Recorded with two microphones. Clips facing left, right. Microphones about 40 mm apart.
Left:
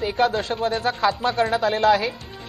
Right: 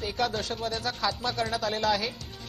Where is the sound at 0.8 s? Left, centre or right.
Left.